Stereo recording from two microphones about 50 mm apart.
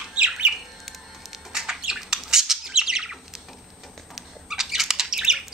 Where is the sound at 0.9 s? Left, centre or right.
Centre.